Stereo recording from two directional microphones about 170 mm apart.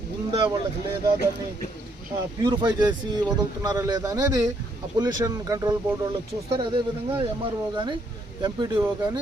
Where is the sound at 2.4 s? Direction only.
25° right (ahead or behind).